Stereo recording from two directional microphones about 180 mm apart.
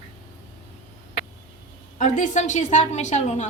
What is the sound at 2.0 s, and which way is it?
A woman's voice, 45° left (ahead or behind).